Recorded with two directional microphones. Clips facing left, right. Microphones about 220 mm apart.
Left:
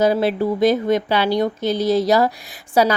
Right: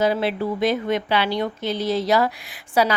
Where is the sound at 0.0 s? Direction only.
40° left (ahead or behind).